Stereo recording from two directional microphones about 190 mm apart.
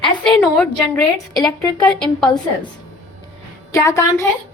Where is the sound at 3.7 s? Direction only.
15° left (ahead or behind).